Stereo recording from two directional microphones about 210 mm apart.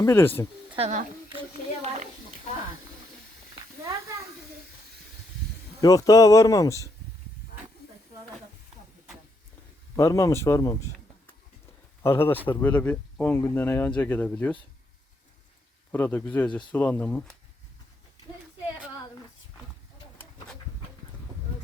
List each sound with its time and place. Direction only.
0.0 s speech: 10° left (ahead or behind)
0.7 s a woman's voice: 30° right (ahead or behind)
5.8 s speech: 15° left (ahead or behind)
9.9 s speech: 15° left (ahead or behind)
12.0 s speech: 10° left (ahead or behind)
15.9 s speech: 10° left (ahead or behind)